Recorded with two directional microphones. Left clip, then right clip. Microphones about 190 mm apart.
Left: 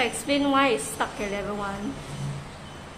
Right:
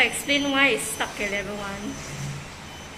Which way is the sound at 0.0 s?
15° left (ahead or behind).